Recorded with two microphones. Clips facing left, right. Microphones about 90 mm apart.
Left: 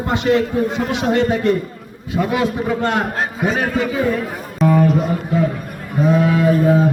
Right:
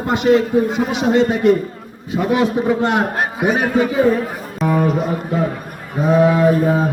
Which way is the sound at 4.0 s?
30° right (ahead or behind).